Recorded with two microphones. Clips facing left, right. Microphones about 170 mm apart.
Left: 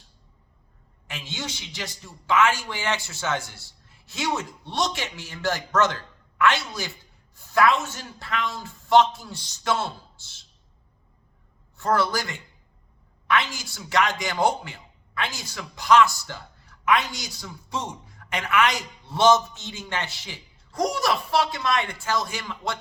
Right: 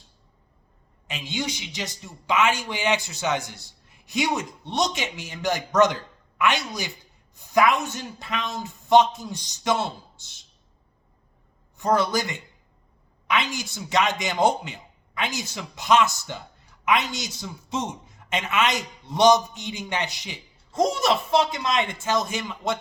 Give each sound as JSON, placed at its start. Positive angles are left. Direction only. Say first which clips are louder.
{"t": 1.0, "sound": "a man's voice", "louder": "right 5 dB", "side_deg": -15}
{"t": 11.8, "sound": "a man's voice", "louder": "right 1 dB", "side_deg": -20}